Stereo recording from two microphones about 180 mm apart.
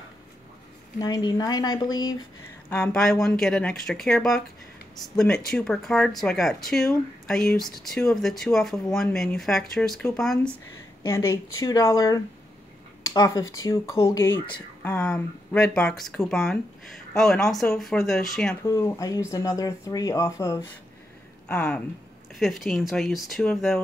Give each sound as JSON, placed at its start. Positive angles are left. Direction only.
{"t": 0.9, "sound": "speech", "side_deg": 20}
{"t": 2.7, "sound": "speech", "side_deg": 5}
{"t": 11.1, "sound": "speech", "side_deg": 15}
{"t": 18.7, "sound": "speech", "side_deg": 15}
{"t": 21.5, "sound": "speech", "side_deg": 5}